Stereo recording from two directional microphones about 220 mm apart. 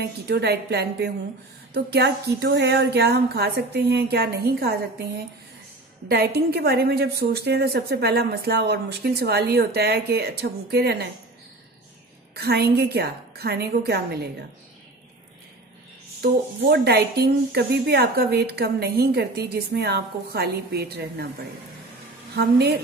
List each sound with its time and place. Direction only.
0.0 s speech: 50° right (ahead or behind)
12.4 s speech: 45° right (ahead or behind)
16.2 s speech: 45° right (ahead or behind)
22.3 s speech: 45° right (ahead or behind)